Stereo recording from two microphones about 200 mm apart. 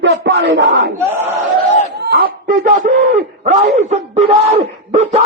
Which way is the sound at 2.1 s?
45° right (ahead or behind).